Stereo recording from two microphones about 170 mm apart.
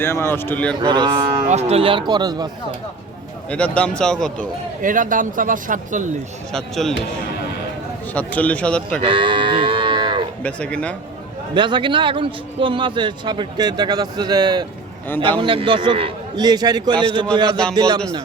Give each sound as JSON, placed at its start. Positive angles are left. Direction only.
{"t": 0.0, "sound": "speech", "side_deg": 15}
{"t": 0.8, "sound": "a man's voice", "side_deg": -25}
{"t": 1.5, "sound": "a man's voice", "side_deg": -40}
{"t": 3.5, "sound": "speech", "side_deg": 5}
{"t": 4.8, "sound": "speech", "side_deg": -50}
{"t": 6.5, "sound": "speech", "side_deg": 5}
{"t": 8.1, "sound": "speech", "side_deg": 10}
{"t": 9.0, "sound": "livestock", "side_deg": -30}
{"t": 10.4, "sound": "speech", "side_deg": 5}
{"t": 11.5, "sound": "a man's voice", "side_deg": -30}